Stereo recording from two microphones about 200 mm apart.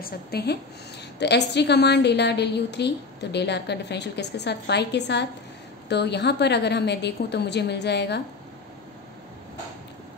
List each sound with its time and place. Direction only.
0.0 s a woman's voice: 55° left (ahead or behind)